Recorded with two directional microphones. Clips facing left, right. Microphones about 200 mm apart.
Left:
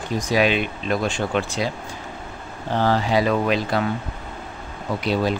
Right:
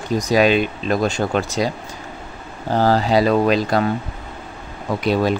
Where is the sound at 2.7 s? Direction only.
35° right (ahead or behind).